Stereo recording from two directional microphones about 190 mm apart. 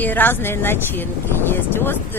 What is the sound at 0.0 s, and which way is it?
Speech, 10° left (ahead or behind).